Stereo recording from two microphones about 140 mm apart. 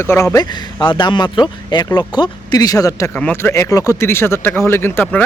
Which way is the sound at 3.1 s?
15° left (ahead or behind).